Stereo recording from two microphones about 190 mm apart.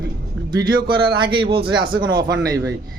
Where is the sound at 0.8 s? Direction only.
25° right (ahead or behind).